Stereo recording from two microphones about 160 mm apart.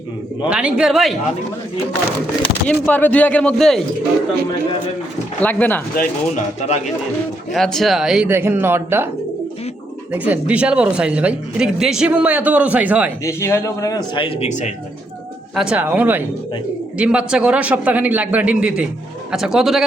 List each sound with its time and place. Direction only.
0.4 s speech: 5° right (ahead or behind)
2.6 s speech: 10° left (ahead or behind)
5.4 s speech: 10° left (ahead or behind)
6.0 s speech: 45° left (ahead or behind)
7.5 s speech: centre (ahead or behind)
8.3 s speech: 15° right (ahead or behind)
10.1 s speech: 10° right (ahead or behind)
13.2 s speech: 20° left (ahead or behind)
14.2 s speech: 35° left (ahead or behind)
15.5 s speech: 5° right (ahead or behind)